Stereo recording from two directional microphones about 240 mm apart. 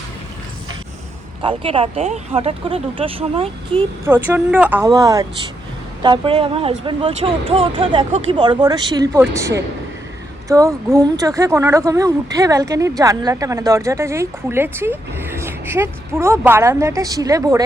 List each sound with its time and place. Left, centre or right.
1.4 s speech: right
4.0 s speech: centre